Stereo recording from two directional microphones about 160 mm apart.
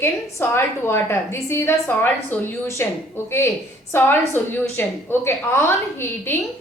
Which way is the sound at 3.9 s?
15° left (ahead or behind).